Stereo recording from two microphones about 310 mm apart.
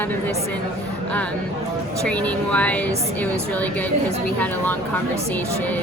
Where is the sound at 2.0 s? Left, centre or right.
Centre.